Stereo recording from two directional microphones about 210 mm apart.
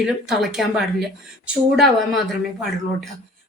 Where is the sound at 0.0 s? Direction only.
Centre (ahead or behind).